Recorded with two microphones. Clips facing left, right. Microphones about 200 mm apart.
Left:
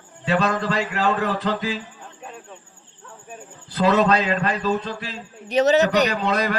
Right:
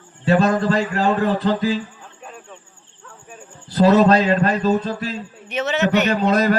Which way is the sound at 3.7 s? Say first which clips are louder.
Right 5 dB; 40° right (ahead or behind).